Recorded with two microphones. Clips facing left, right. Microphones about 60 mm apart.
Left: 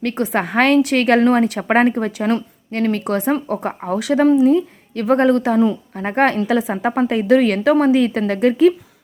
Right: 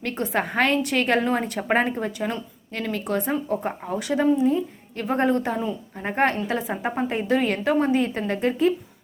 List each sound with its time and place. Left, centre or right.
0.0 s a woman's voice: left
2.7 s speech: left